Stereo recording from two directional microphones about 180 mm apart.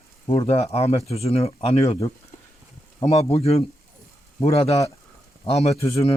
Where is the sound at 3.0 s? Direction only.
35° left (ahead or behind).